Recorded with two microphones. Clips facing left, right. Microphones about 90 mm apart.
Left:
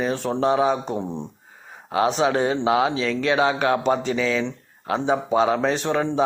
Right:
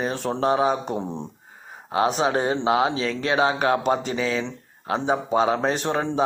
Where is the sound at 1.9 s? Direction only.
35° right (ahead or behind).